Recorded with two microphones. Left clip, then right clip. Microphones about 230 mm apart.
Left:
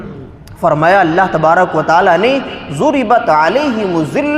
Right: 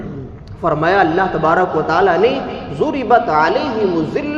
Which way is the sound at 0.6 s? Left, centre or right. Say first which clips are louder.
Left 4 dB; left.